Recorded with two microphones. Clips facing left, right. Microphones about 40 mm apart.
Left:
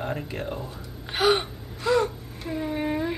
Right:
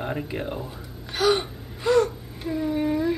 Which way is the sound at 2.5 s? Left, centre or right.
Centre.